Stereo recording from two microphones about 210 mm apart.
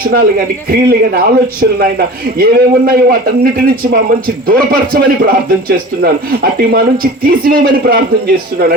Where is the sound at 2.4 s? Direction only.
45° right (ahead or behind).